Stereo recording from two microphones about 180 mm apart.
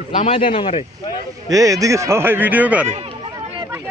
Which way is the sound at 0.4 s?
30° left (ahead or behind).